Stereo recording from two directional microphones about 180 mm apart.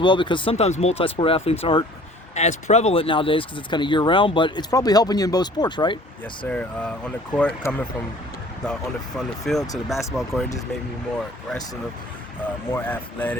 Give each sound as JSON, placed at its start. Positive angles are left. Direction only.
{"t": 0.0, "sound": "speech", "side_deg": 25}
{"t": 6.5, "sound": "speech", "side_deg": 5}
{"t": 12.4, "sound": "speech", "side_deg": 10}